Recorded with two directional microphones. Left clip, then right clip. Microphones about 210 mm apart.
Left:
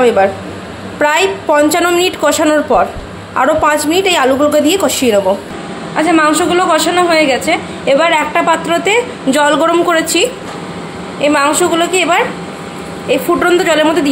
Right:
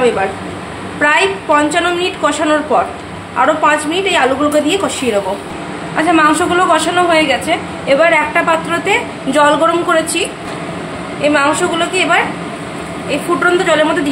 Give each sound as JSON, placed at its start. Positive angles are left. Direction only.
{"t": 1.0, "sound": "a woman's voice", "side_deg": 25}
{"t": 11.2, "sound": "a woman's voice", "side_deg": 25}
{"t": 13.4, "sound": "a woman's voice", "side_deg": 20}